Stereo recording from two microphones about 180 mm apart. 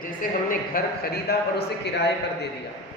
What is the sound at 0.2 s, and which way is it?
A man's voice, 55° left (ahead or behind).